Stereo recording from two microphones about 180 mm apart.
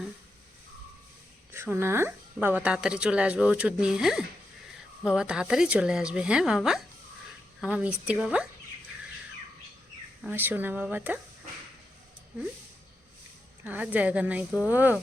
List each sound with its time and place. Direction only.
1.5 s a woman's voice: 15° right (ahead or behind)
10.2 s a woman's voice: 10° right (ahead or behind)
13.7 s a woman's voice: 10° right (ahead or behind)